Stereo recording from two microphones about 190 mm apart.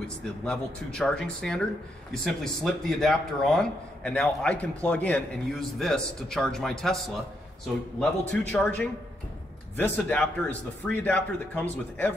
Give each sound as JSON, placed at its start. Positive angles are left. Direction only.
{"t": 0.5, "sound": "a man's voice", "side_deg": 5}